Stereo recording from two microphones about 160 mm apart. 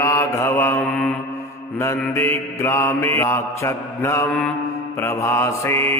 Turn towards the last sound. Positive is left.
turn(degrees=15)  # may be behind; listen again after turning